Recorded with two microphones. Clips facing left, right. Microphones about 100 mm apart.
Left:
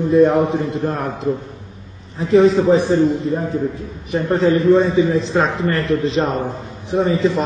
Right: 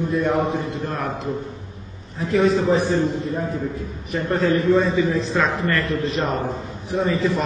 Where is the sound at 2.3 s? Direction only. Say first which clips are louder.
Left 6 dB; 30° left (ahead or behind).